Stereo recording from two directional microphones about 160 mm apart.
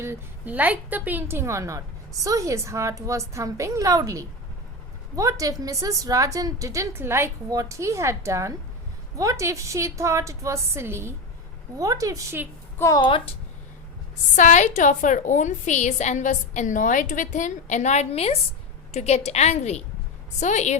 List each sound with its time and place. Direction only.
0.0 s a woman's voice: 15° right (ahead or behind)
12.8 s a woman's voice: 25° left (ahead or behind)
14.3 s a woman's voice: 50° left (ahead or behind)